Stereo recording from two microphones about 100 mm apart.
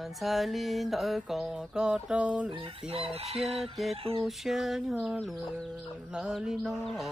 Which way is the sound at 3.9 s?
70° right (ahead or behind).